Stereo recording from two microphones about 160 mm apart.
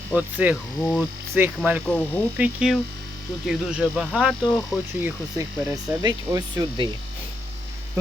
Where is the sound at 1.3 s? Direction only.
10° right (ahead or behind).